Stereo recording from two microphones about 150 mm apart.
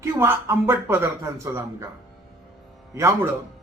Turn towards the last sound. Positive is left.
turn(degrees=-20)  # may be behind; listen again after turning